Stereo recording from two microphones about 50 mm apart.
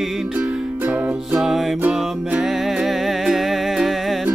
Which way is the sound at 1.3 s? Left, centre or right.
Centre.